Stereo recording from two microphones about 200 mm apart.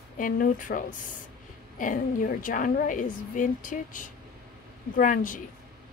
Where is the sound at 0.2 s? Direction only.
40° left (ahead or behind).